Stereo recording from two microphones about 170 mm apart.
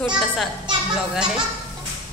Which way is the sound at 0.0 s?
Centre (ahead or behind).